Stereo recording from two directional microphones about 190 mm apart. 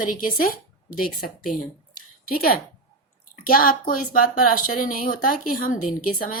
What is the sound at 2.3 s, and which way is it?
A woman's voice, 50° left (ahead or behind).